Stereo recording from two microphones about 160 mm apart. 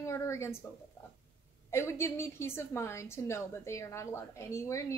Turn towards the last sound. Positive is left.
turn(degrees=20)  # may be behind; listen again after turning